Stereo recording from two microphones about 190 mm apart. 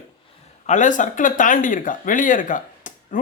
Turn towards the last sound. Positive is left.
turn(degrees=40)  # may be behind; listen again after turning